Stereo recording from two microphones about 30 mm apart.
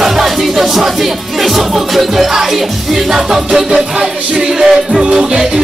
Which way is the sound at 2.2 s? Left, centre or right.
Centre.